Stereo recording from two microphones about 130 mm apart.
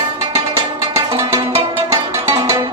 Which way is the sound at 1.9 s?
25° right (ahead or behind).